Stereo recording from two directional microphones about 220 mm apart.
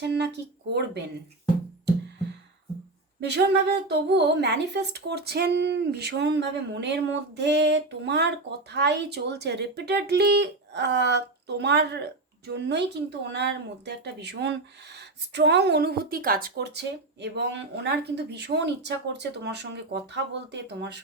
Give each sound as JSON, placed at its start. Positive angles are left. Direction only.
{"t": 0.0, "sound": "speech", "side_deg": -50}
{"t": 3.2, "sound": "speech", "side_deg": -50}